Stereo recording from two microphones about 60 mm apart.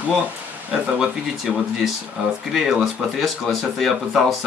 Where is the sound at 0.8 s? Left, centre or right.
Centre.